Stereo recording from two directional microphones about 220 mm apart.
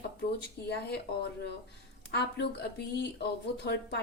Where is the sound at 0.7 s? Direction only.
50° left (ahead or behind).